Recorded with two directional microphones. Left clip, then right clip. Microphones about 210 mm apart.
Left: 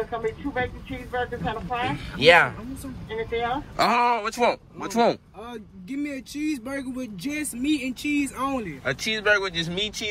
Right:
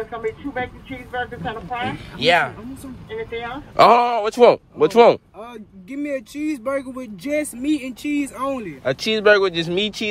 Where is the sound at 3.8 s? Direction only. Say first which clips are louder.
Right 9 dB; 25° right (ahead or behind).